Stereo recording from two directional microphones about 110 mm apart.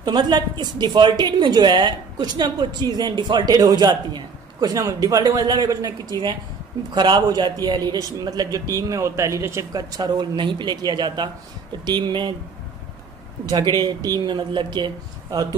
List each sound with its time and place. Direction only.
0.0 s a woman's voice: 40° right (ahead or behind)
13.8 s speech: 40° right (ahead or behind)